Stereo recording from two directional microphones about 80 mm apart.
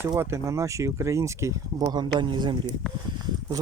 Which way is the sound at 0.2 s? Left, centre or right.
Right.